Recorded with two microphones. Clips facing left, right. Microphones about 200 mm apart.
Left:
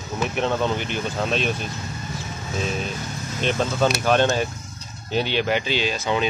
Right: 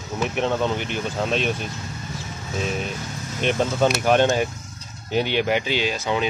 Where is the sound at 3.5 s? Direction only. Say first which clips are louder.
Right 1 dB; 15° right (ahead or behind).